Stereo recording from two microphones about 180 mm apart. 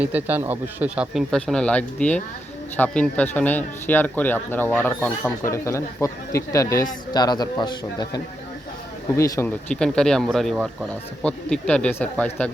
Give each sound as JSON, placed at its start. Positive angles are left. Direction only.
{"t": 0.0, "sound": "speech", "side_deg": -10}
{"t": 9.6, "sound": "speech", "side_deg": 5}